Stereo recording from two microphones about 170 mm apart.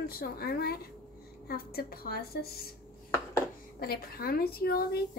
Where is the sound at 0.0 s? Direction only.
60° left (ahead or behind).